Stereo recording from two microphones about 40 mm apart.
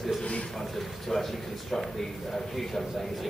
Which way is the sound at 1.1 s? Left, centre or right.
Centre.